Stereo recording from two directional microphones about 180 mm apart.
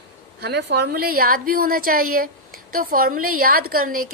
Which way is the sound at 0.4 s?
65° right (ahead or behind).